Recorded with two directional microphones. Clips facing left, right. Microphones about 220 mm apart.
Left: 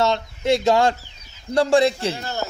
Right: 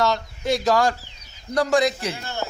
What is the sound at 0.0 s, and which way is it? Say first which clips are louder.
A man's voice: left 2 dB; 25° left (ahead or behind).